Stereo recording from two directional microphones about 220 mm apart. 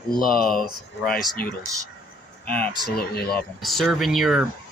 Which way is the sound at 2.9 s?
45° left (ahead or behind).